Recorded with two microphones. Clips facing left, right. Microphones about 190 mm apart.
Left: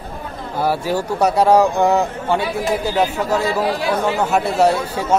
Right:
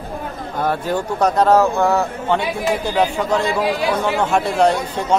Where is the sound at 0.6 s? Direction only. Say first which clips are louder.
Left 1 dB; 5° left (ahead or behind).